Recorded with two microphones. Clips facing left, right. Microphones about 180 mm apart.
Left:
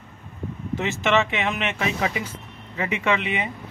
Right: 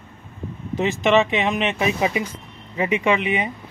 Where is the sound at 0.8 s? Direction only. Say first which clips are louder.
Right 5 dB; 15° right (ahead or behind).